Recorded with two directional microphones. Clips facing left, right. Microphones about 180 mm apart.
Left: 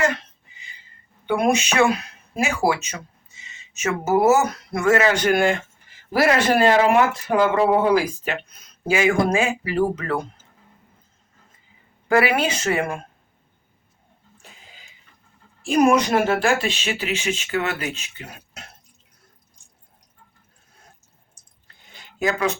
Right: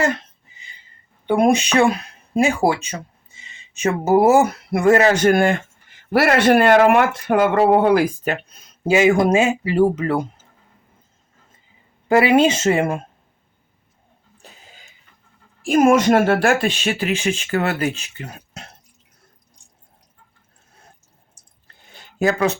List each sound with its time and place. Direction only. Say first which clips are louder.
1.3 s speech: right 4 dB; 30° right (ahead or behind); by 5.5 s 50° right (ahead or behind)
6.1 s speech: right 4 dB; 60° right (ahead or behind)
8.9 s speech: right 4 dB; 20° right (ahead or behind)
12.0 s speech: right 5 dB; 20° right (ahead or behind)
15.8 s speech: right 3 dB; 45° right (ahead or behind)
22.2 s speech: right 4 dB; 40° right (ahead or behind)